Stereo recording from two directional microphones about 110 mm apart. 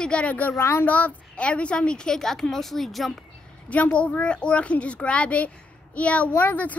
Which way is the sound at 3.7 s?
15° left (ahead or behind).